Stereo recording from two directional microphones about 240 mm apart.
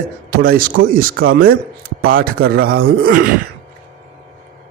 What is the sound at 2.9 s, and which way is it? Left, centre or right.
Speech, right.